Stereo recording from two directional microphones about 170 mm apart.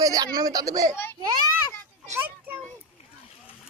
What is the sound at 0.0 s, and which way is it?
Speech, 20° right (ahead or behind).